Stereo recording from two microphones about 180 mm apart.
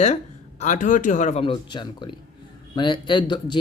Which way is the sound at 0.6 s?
45° left (ahead or behind).